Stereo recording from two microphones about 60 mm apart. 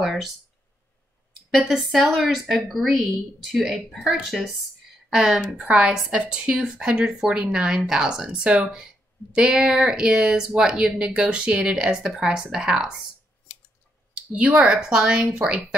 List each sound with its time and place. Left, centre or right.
1.6 s a woman's voice: centre
5.7 s speech: centre
14.4 s speech: centre